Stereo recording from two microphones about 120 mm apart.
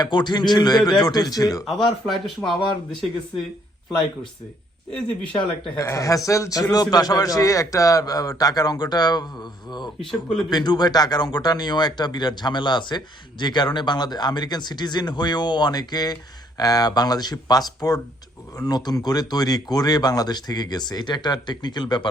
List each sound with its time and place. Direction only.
0.0 s a man's voice: 40° left (ahead or behind)
2.0 s speech: centre (ahead or behind)
4.9 s speech: 10° left (ahead or behind)
5.7 s a man's voice: 25° left (ahead or behind)
10.0 s speech: centre (ahead or behind)
10.5 s a man's voice: 35° left (ahead or behind)